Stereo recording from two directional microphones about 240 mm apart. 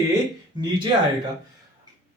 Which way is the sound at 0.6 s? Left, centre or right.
Centre.